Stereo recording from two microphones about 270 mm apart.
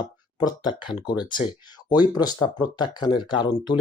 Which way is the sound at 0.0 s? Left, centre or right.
Centre.